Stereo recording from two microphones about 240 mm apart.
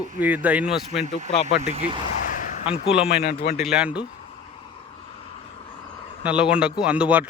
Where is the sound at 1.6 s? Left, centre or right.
Right.